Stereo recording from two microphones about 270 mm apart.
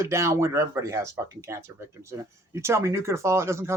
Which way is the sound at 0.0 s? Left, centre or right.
Centre.